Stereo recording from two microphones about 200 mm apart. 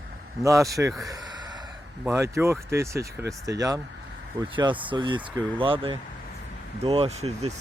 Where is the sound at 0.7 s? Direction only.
15° right (ahead or behind).